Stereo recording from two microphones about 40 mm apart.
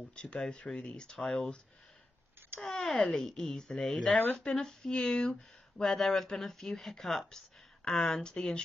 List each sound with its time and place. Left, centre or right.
0.1 s speech: left
2.6 s speech: centre